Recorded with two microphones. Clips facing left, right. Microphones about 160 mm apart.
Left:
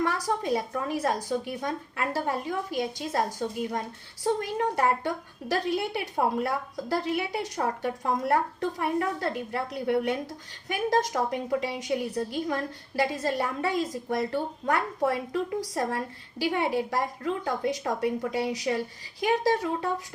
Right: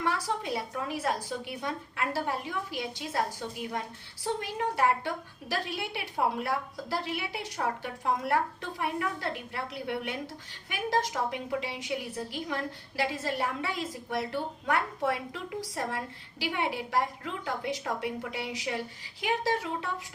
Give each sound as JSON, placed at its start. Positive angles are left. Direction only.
{"t": 0.0, "sound": "a woman's voice", "side_deg": 45}
{"t": 13.0, "sound": "a woman's voice", "side_deg": 45}